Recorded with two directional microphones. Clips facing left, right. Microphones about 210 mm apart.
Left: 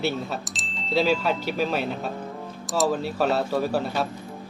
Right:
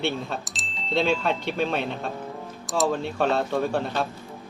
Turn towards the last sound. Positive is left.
turn(degrees=5)  # may be behind; listen again after turning